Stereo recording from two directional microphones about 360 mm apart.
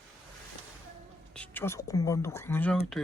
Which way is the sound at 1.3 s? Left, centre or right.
Centre.